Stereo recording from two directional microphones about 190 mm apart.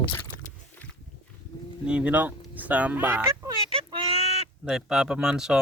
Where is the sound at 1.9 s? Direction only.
5° right (ahead or behind).